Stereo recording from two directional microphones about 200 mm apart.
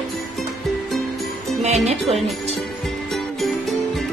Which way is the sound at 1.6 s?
35° right (ahead or behind).